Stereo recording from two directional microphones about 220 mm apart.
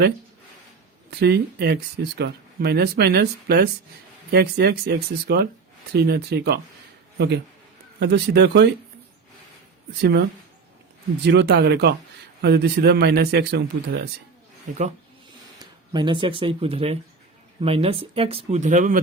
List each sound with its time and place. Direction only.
1.1 s speech: 50° right (ahead or behind)
7.9 s speech: 50° right (ahead or behind)
10.0 s speech: 50° right (ahead or behind)
15.5 s speech: 20° right (ahead or behind); by 19.0 s 35° right (ahead or behind)